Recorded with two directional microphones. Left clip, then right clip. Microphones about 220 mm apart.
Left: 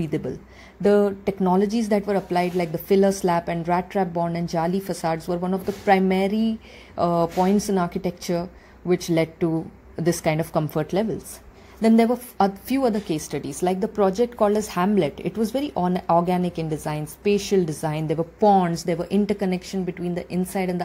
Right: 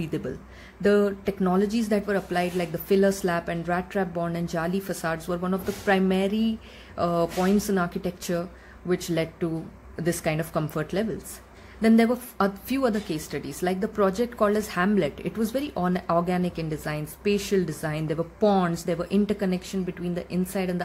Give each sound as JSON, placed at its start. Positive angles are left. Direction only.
{"t": 0.0, "sound": "a woman's voice", "side_deg": 15}